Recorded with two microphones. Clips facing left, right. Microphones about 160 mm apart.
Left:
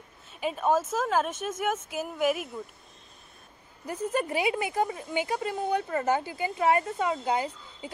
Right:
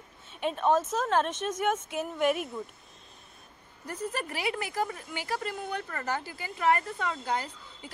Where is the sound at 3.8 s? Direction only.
20° left (ahead or behind).